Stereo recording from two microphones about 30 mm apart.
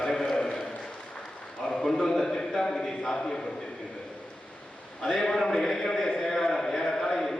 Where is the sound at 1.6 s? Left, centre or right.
Centre.